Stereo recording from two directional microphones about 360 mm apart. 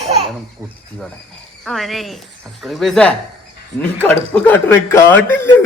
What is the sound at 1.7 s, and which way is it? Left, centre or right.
Speech, centre.